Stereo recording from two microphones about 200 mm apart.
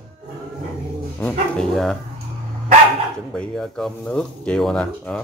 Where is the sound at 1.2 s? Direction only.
5° left (ahead or behind).